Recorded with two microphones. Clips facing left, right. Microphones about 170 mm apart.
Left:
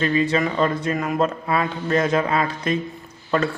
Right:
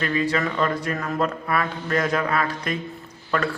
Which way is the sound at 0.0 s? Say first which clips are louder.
Left 3 dB; 25° left (ahead or behind).